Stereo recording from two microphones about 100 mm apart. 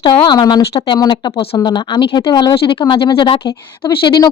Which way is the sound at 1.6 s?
45° left (ahead or behind).